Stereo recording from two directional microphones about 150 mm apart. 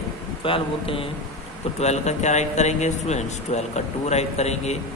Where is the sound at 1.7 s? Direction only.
50° left (ahead or behind).